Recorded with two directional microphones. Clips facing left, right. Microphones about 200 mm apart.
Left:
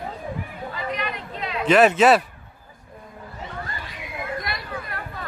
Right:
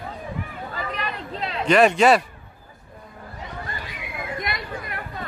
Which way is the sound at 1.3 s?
30° right (ahead or behind).